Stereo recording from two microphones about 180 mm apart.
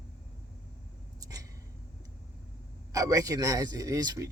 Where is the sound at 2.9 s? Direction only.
20° right (ahead or behind).